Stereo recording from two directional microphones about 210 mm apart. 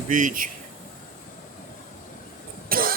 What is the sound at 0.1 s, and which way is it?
Speech, 40° right (ahead or behind).